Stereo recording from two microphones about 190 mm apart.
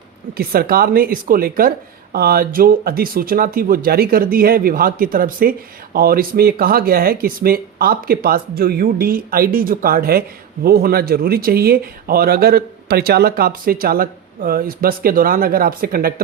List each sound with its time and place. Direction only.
0.3 s speech: 50° right (ahead or behind)